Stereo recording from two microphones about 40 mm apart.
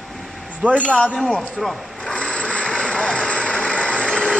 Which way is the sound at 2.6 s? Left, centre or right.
Centre.